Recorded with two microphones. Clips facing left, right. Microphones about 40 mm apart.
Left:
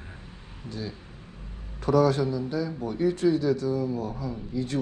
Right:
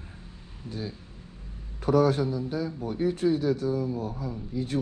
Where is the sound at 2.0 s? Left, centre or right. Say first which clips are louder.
Left 1 dB; centre.